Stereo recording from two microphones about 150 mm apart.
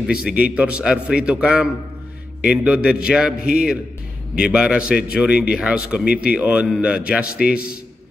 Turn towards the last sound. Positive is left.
turn(degrees=80)